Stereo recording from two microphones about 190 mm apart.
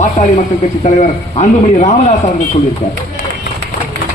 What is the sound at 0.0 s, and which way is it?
A man's voice, 40° left (ahead or behind).